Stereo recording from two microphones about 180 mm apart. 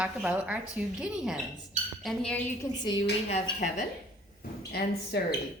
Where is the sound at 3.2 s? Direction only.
35° left (ahead or behind).